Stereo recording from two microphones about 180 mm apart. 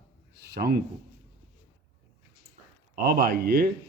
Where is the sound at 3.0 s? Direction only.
60° right (ahead or behind).